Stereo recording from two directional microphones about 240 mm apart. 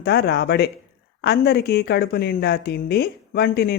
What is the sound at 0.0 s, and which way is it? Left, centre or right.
Speech, left.